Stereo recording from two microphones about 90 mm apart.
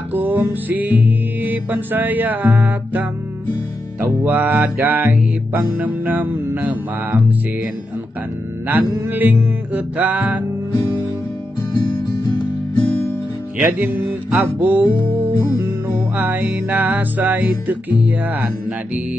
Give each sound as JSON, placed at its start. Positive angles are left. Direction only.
{"t": 0.1, "sound": "music", "side_deg": -20}
{"t": 8.6, "sound": "music", "side_deg": -20}
{"t": 13.6, "sound": "music", "side_deg": -20}